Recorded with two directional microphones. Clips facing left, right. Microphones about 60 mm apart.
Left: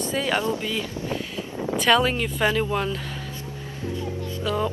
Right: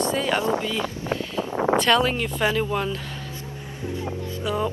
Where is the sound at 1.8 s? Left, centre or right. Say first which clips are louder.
Left 5 dB; centre.